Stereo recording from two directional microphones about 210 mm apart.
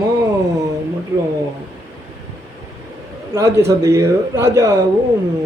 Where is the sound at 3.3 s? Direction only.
15° right (ahead or behind).